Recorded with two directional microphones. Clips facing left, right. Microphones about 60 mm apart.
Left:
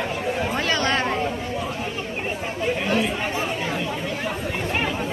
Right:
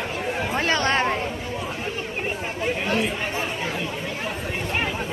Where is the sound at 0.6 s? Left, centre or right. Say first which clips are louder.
Right 3 dB; right.